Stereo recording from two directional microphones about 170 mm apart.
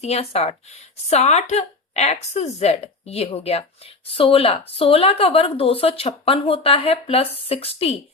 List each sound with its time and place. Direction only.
0.0 s a woman's voice: 40° left (ahead or behind)